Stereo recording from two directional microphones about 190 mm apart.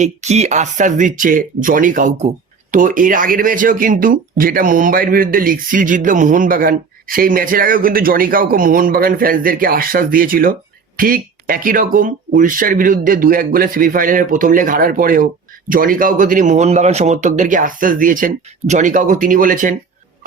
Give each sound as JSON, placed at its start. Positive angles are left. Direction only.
{"t": 0.0, "sound": "speech", "side_deg": -35}